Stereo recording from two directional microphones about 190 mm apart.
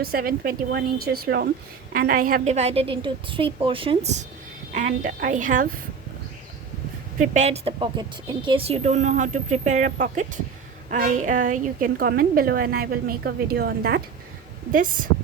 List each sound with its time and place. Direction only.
0.0 s a woman's voice: 50° right (ahead or behind)
7.2 s a woman's voice: 35° right (ahead or behind); by 14.0 s 55° right (ahead or behind)